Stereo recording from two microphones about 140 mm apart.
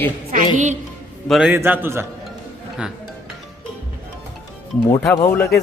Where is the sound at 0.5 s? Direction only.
60° right (ahead or behind).